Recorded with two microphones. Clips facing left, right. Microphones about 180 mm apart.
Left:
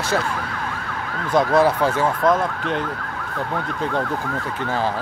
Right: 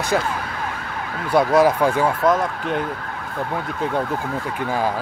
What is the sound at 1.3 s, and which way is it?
Speech, 10° right (ahead or behind).